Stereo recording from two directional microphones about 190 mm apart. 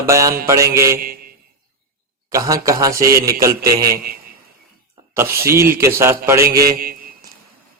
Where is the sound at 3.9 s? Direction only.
50° right (ahead or behind).